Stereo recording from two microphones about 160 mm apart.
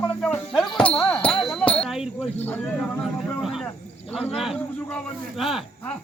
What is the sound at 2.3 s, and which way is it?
Speech, 10° left (ahead or behind).